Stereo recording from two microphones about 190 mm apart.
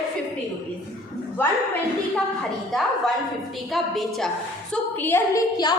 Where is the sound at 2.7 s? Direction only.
Centre (ahead or behind).